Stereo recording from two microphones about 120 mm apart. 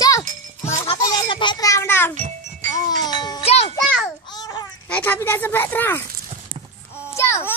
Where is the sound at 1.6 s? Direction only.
25° left (ahead or behind).